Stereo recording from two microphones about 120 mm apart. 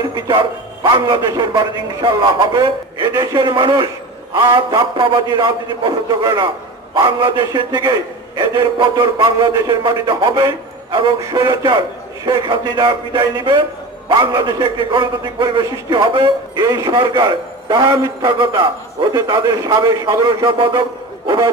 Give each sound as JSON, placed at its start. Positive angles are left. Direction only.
{"t": 0.1, "sound": "a man's voice", "side_deg": -40}
{"t": 10.9, "sound": "a man's voice", "side_deg": -45}